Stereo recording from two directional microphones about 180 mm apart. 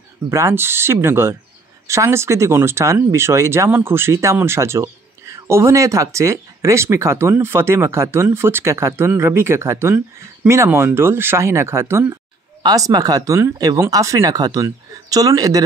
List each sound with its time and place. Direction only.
0.3 s speech: 15° right (ahead or behind)